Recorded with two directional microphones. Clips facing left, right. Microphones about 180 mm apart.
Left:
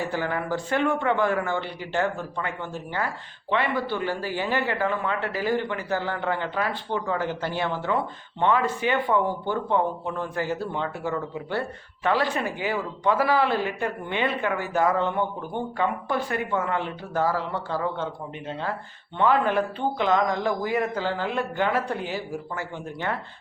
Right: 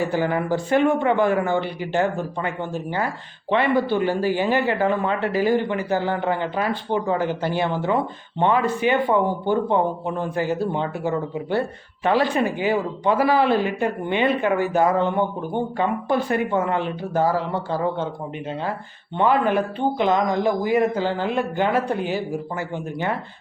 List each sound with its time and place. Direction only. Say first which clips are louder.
0.0 s speech: right 6 dB; 15° right (ahead or behind)
19.1 s speech: right 3 dB; 15° right (ahead or behind)